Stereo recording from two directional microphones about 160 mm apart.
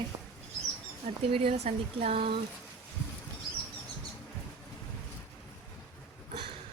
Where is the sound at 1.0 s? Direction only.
40° right (ahead or behind).